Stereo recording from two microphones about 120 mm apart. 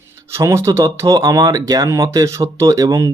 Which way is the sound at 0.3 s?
25° right (ahead or behind).